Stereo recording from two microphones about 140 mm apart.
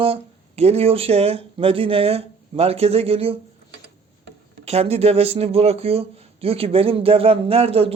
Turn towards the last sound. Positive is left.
turn(degrees=-45)  # may be behind; listen again after turning